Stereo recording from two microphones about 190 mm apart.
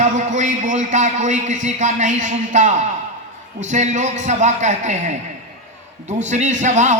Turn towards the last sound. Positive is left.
turn(degrees=-40)  # may be behind; listen again after turning